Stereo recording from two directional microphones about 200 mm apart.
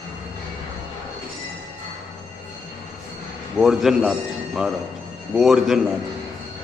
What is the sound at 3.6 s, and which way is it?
A man's voice, centre (ahead or behind).